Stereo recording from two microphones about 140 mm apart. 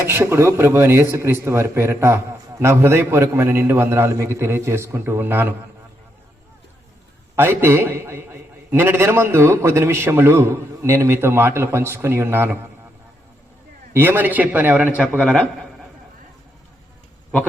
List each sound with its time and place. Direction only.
0.0 s a man's voice: 15° right (ahead or behind)
7.3 s a man's voice: 15° right (ahead or behind)
13.9 s a man's voice: 15° right (ahead or behind)
15.1 s a man's voice: 10° left (ahead or behind)